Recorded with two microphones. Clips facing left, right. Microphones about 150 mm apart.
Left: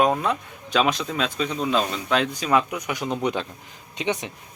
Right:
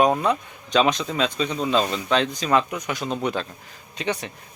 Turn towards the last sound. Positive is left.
turn(degrees=20)  # may be behind; listen again after turning